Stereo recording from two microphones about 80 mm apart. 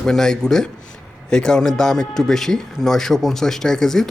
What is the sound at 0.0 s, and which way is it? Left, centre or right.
Speech, centre.